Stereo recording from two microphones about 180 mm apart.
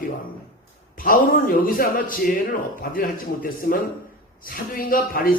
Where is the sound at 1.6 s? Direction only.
50° left (ahead or behind).